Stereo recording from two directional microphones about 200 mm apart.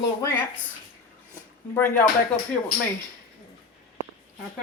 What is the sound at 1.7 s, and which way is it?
Speech, 10° left (ahead or behind).